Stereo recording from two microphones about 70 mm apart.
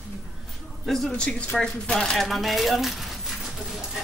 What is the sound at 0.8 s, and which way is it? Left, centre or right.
Speech, centre.